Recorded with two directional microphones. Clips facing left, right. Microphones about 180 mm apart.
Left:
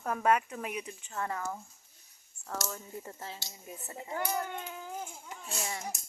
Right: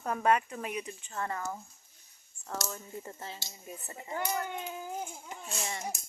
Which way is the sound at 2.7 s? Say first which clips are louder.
Even; centre (ahead or behind).